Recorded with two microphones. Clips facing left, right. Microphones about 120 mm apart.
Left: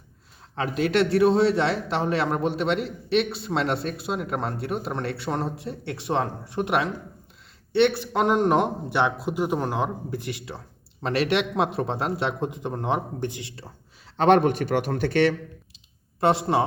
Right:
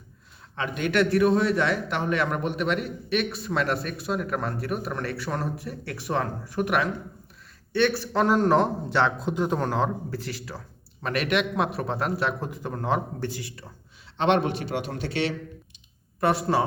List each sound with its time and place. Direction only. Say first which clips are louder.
0.5 s a man's voice: left 2 dB; 35° left (ahead or behind)
14.2 s a man's voice: left 4 dB; 45° left (ahead or behind)
16.2 s a man's voice: left 2 dB; 25° left (ahead or behind)